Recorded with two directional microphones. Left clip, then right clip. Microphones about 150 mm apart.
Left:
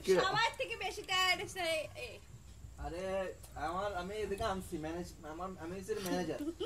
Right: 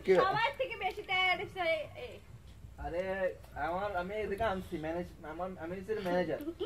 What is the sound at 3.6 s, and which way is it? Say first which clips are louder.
Speech: right 3 dB; 15° left (ahead or behind).